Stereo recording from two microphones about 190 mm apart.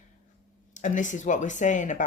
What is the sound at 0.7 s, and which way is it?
Speech, 40° left (ahead or behind).